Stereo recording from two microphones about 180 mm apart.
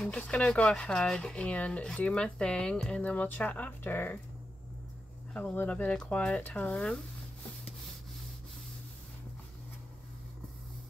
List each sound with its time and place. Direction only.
0.0 s speech: 5° left (ahead or behind)
5.3 s speech: 10° left (ahead or behind)